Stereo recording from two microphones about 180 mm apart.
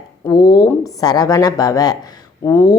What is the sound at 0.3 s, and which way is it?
Speech, 25° left (ahead or behind).